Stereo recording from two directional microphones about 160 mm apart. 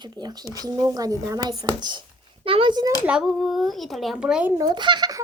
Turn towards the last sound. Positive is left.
turn(degrees=-25)  # may be behind; listen again after turning